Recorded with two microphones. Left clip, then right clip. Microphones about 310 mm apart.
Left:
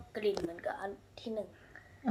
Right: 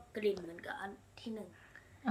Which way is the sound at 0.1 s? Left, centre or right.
Centre.